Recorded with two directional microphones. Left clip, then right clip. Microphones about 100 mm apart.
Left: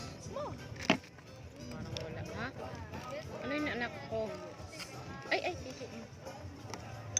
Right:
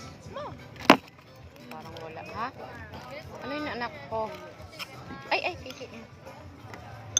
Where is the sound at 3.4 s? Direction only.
20° left (ahead or behind).